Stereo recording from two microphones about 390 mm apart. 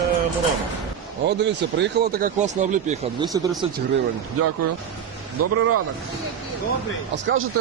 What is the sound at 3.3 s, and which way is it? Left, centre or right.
Speech, centre.